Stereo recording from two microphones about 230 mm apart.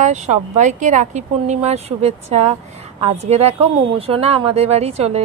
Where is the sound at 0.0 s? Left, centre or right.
Right.